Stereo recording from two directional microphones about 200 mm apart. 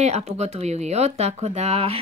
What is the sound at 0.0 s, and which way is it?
Speech, 35° right (ahead or behind).